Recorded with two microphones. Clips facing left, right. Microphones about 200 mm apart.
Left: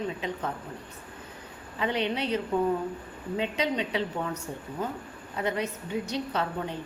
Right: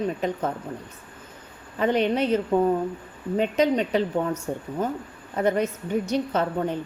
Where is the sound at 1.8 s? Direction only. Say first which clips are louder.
Right 7 dB; 45° right (ahead or behind).